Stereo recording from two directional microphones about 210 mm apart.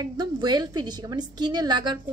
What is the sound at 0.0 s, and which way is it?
A woman's voice, 20° right (ahead or behind).